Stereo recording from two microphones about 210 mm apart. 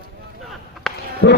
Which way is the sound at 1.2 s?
55° left (ahead or behind).